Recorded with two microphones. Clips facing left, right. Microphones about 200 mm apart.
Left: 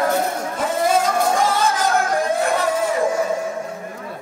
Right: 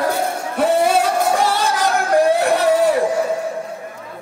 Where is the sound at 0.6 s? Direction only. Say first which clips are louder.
Right 4 dB; 65° right (ahead or behind).